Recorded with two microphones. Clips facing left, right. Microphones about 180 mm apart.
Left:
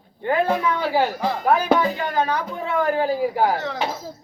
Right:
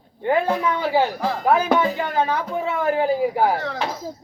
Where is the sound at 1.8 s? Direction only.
25° right (ahead or behind).